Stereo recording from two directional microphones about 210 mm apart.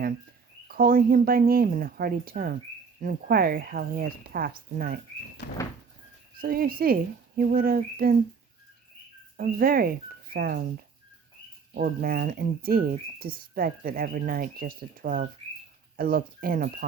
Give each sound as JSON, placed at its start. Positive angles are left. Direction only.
{"t": 0.7, "sound": "speech", "side_deg": -45}
{"t": 5.4, "sound": "sliding door", "side_deg": 40}
{"t": 6.4, "sound": "speech", "side_deg": -45}
{"t": 9.4, "sound": "speech", "side_deg": -45}
{"t": 11.7, "sound": "speech", "side_deg": -40}